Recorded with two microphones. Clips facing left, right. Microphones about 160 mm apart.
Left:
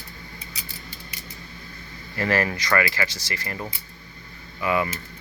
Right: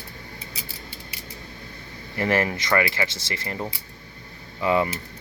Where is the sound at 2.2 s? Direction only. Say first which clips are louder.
Right 1 dB; 20° right (ahead or behind).